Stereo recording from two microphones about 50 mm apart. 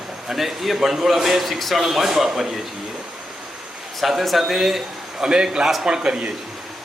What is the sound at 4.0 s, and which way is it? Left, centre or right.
A man's voice, centre.